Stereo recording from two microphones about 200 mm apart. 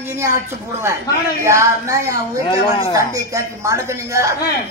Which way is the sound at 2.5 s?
25° left (ahead or behind).